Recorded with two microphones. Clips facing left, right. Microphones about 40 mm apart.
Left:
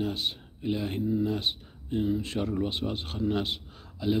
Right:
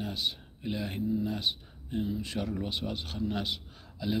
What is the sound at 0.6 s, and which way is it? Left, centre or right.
Speech, centre.